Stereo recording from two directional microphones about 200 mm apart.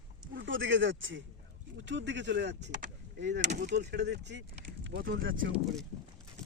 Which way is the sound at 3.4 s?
40° right (ahead or behind).